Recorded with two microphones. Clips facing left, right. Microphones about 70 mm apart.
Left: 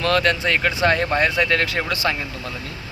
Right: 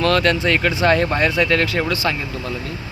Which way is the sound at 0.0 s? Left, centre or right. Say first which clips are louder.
Right 2 dB; centre.